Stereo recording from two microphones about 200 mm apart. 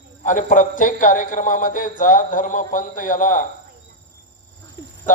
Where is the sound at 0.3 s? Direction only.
40° left (ahead or behind).